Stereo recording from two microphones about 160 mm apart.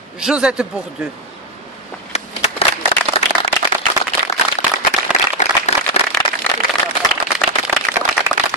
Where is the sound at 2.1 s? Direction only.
40° left (ahead or behind).